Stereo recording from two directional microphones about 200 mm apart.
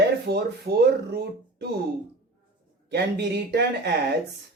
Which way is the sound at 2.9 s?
55° right (ahead or behind).